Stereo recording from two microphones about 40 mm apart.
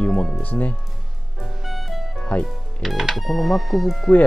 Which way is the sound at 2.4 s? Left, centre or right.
Centre.